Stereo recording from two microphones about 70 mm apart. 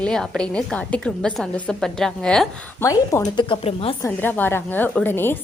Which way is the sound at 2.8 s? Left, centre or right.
Left.